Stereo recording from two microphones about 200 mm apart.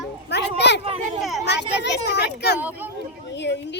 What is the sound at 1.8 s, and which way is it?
A child's voice, 55° left (ahead or behind).